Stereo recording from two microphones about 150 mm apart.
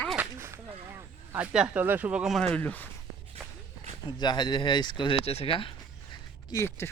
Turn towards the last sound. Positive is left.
turn(degrees=20)  # may be behind; listen again after turning